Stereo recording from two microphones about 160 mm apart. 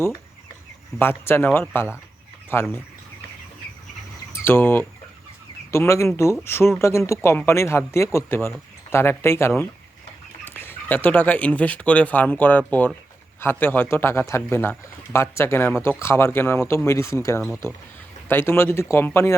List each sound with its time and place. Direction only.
0.9 s speech: 15° left (ahead or behind)
4.3 s speech: 15° left (ahead or behind)
10.5 s speech: 10° left (ahead or behind)